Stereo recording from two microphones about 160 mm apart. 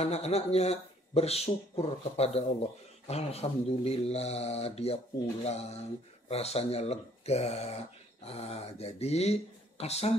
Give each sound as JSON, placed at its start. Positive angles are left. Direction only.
{"t": 0.0, "sound": "speech", "side_deg": 40}